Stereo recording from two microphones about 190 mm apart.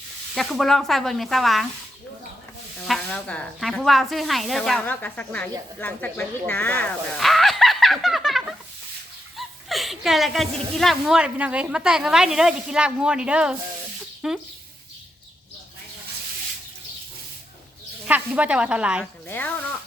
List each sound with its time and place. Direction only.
0.3 s speech: centre (ahead or behind)
2.8 s speech: 5° left (ahead or behind)
18.0 s speech: 10° right (ahead or behind)
19.3 s speech: 10° left (ahead or behind)